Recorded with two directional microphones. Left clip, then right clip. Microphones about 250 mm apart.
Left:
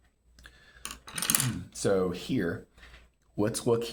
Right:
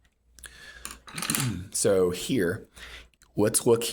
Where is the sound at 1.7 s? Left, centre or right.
Right.